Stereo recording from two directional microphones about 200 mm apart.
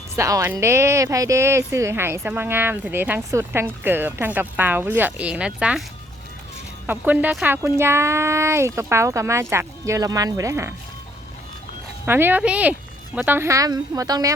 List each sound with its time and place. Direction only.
0.2 s speech: 15° right (ahead or behind)
6.8 s speech: 10° right (ahead or behind)
12.0 s speech: 10° right (ahead or behind)